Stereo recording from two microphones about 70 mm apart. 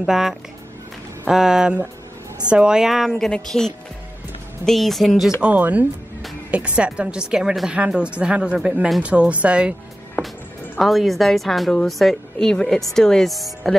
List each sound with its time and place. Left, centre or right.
0.0 s a woman's voice: centre
3.3 s a woman's voice: centre
5.4 s a woman's voice: centre
10.2 s music: left
10.8 s a woman's voice: centre